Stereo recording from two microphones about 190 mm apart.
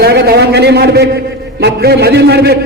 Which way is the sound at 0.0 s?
60° right (ahead or behind).